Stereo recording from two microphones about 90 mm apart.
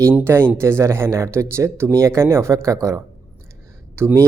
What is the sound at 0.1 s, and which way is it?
Speech, 25° right (ahead or behind).